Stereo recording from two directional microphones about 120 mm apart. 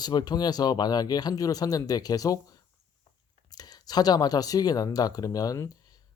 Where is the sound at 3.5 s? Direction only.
35° left (ahead or behind).